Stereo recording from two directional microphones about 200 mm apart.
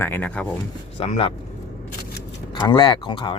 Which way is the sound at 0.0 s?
10° left (ahead or behind).